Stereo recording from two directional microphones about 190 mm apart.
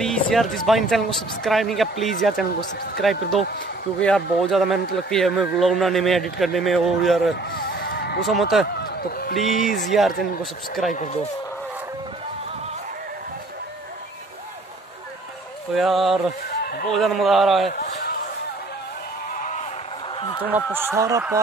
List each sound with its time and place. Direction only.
0.0 s speech: centre (ahead or behind)
7.5 s music: 60° left (ahead or behind)
8.2 s speech: centre (ahead or behind)
9.5 s speech: 40° left (ahead or behind)
9.8 s speech: centre (ahead or behind)
15.7 s speech: centre (ahead or behind)
16.4 s a sound: 50° left (ahead or behind)
16.9 s speech: centre (ahead or behind)
17.7 s a sound: 45° left (ahead or behind)
20.5 s speech: 10° right (ahead or behind)